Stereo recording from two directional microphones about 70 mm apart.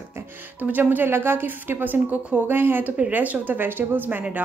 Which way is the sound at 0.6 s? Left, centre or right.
Right.